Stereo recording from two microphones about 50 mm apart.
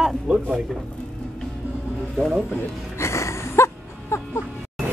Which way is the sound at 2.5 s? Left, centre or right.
Left.